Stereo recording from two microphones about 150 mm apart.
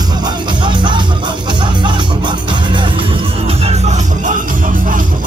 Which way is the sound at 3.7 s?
50° right (ahead or behind).